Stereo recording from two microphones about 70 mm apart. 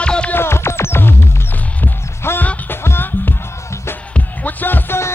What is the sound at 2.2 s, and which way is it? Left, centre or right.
Music, left.